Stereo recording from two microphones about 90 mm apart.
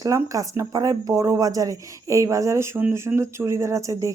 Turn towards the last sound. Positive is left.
turn(degrees=-35)  # may be behind; listen again after turning